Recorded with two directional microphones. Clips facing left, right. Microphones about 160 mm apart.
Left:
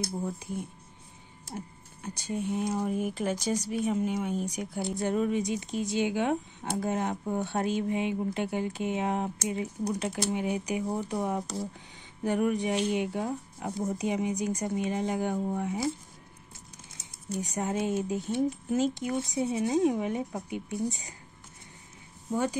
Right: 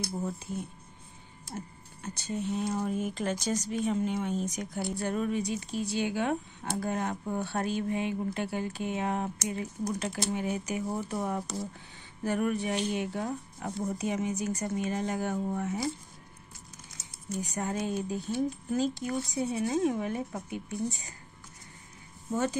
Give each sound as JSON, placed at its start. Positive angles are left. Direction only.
{"t": 0.1, "sound": "speech", "side_deg": 15}
{"t": 2.0, "sound": "speech", "side_deg": 10}
{"t": 17.6, "sound": "speech", "side_deg": 20}
{"t": 22.3, "sound": "speech", "side_deg": 15}